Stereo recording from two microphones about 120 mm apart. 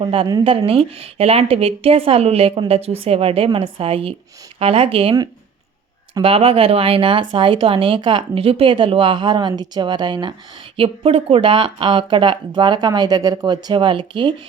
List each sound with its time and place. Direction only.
0.0 s speech: 50° right (ahead or behind)
6.2 s speech: 55° right (ahead or behind); by 10.3 s 40° right (ahead or behind)
10.8 s speech: 50° right (ahead or behind)